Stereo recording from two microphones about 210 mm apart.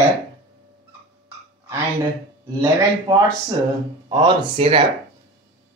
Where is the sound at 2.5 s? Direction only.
15° right (ahead or behind).